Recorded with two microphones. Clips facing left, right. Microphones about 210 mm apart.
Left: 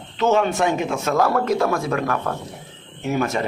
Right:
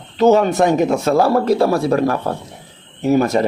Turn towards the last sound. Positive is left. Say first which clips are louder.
# right 8 dB
turn(degrees=-40)  # may be behind; listen again after turning